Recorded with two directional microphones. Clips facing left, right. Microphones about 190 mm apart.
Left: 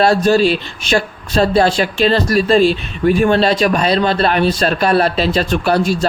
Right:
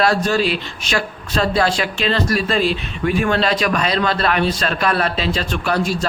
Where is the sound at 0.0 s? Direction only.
30° left (ahead or behind).